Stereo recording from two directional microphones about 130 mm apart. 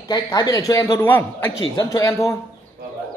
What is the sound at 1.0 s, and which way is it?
A man's voice, 15° left (ahead or behind).